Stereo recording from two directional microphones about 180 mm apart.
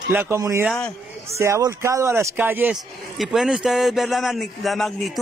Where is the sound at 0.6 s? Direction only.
5° left (ahead or behind).